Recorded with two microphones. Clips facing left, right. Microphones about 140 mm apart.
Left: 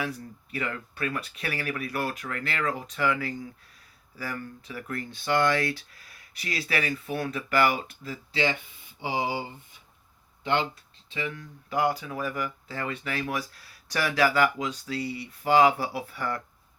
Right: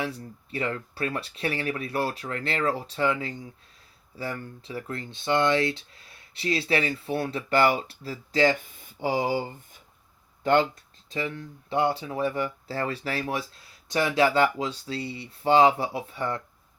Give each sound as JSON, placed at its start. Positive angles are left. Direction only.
{"t": 0.0, "sound": "speech", "side_deg": -30}
{"t": 10.4, "sound": "speech", "side_deg": -45}
{"t": 11.1, "sound": "speech", "side_deg": -35}